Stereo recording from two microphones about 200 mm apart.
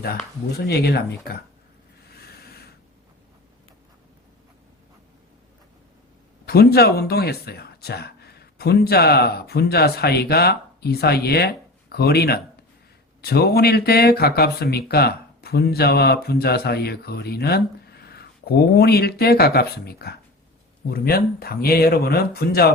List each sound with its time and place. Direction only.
0.5 s speech: 55° left (ahead or behind)
2.1 s a sound: 50° left (ahead or behind)
6.4 s speech: 50° left (ahead or behind)